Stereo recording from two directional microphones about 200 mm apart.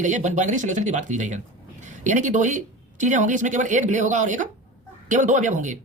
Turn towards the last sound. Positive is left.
turn(degrees=-40)  # may be behind; listen again after turning